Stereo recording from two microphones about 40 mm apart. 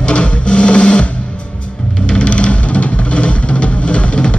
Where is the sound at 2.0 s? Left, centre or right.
Left.